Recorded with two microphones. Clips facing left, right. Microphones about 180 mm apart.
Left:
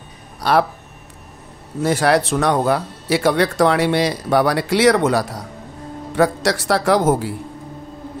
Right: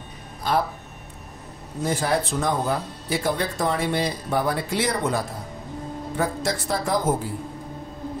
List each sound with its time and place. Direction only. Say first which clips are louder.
0.4 s speech: left 7 dB; 75° left (ahead or behind)
1.8 s a man's voice: left 7 dB; 75° left (ahead or behind)